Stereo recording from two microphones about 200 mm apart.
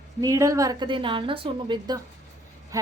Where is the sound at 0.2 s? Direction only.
15° right (ahead or behind).